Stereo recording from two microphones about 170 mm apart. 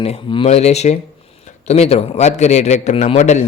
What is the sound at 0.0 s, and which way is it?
A man's voice, 35° left (ahead or behind).